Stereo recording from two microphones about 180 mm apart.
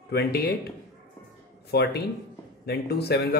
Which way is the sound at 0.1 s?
60° left (ahead or behind).